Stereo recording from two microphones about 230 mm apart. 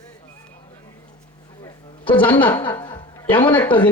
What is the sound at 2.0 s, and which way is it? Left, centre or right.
Speech, centre.